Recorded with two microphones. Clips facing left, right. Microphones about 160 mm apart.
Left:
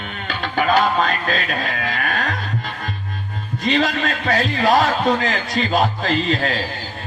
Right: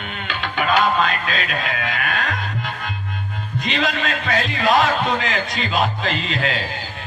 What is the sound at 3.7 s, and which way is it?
Speech, 40° left (ahead or behind).